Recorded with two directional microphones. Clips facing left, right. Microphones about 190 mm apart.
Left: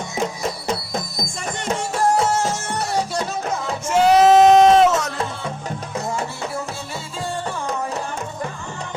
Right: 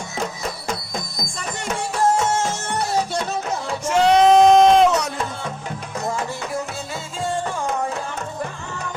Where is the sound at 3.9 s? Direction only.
5° left (ahead or behind).